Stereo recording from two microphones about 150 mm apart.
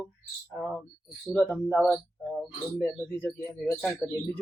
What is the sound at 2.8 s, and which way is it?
Speech, 15° left (ahead or behind).